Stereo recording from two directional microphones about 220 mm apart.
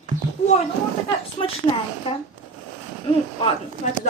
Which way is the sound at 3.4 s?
30° left (ahead or behind).